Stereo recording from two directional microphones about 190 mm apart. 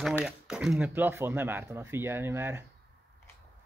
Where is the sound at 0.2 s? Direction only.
5° right (ahead or behind).